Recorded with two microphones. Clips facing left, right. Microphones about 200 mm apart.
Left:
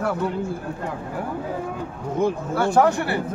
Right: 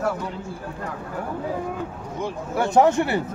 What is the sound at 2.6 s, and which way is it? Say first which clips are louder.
Speech: right 1 dB; 20° right (ahead or behind).